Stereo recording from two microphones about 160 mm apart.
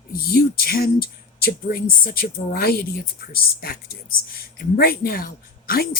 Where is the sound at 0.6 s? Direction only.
70° left (ahead or behind).